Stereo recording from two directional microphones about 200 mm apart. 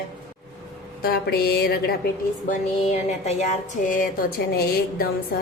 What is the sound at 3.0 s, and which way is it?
Speech, 35° left (ahead or behind).